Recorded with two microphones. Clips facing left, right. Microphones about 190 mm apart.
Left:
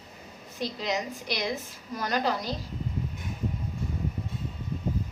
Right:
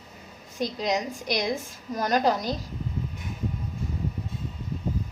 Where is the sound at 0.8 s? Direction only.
45° right (ahead or behind).